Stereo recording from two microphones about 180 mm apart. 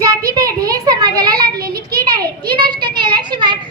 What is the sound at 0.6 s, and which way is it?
Speech, 20° right (ahead or behind).